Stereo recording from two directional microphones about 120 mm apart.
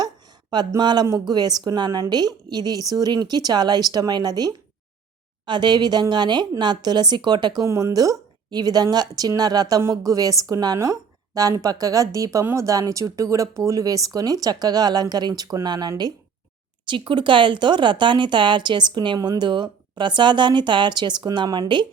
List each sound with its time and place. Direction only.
0.5 s a woman's voice: 35° right (ahead or behind)